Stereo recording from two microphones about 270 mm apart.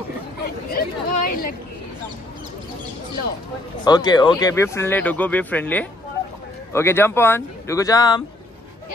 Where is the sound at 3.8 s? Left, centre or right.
Centre.